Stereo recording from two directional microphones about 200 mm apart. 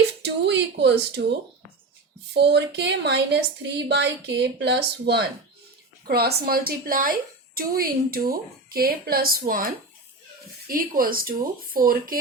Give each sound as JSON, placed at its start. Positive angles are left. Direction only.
{"t": 0.2, "sound": "a woman's voice", "side_deg": -55}